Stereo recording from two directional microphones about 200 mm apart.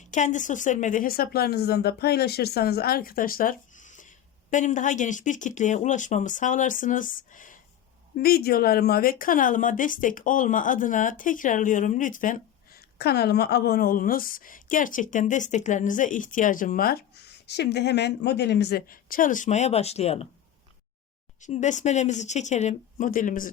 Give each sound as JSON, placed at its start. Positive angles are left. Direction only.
{"t": 0.1, "sound": "a woman's voice", "side_deg": 40}
{"t": 21.4, "sound": "speech", "side_deg": 35}